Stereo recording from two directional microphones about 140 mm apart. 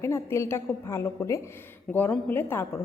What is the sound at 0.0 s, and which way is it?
A woman's voice, 20° left (ahead or behind).